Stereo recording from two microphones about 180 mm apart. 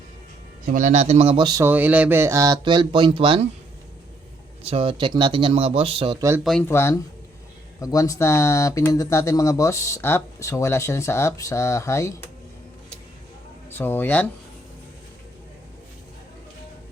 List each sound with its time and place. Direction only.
0.6 s speech: 45° right (ahead or behind); by 1.6 s 25° right (ahead or behind)
1.6 s speech: 10° right (ahead or behind); by 3.4 s 30° right (ahead or behind)
4.6 s speech: 35° right (ahead or behind)
6.4 s speech: centre (ahead or behind)
6.7 s speech: 15° left (ahead or behind)
13.7 s speech: 10° left (ahead or behind)